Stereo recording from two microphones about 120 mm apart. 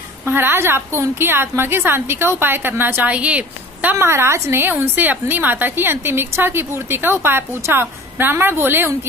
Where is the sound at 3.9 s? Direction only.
20° right (ahead or behind).